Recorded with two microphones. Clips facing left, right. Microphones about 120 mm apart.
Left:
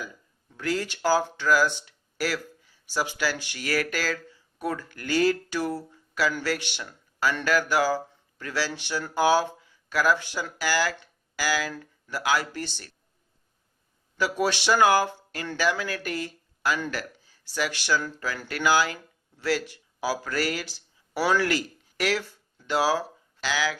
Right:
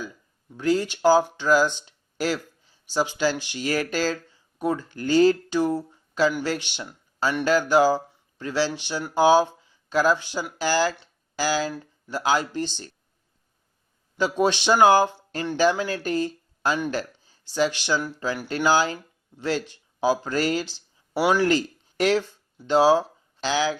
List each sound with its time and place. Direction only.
0.5 s speech: 20° right (ahead or behind)
11.0 s a sound: 25° right (ahead or behind)
12.0 s speech: 25° right (ahead or behind)
14.2 s speech: 20° right (ahead or behind)